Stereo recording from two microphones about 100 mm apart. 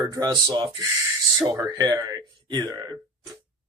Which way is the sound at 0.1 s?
40° right (ahead or behind).